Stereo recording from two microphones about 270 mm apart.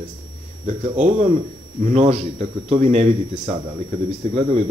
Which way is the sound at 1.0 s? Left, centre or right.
Right.